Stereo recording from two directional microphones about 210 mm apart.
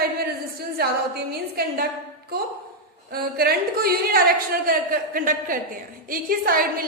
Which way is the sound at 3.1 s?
45° right (ahead or behind).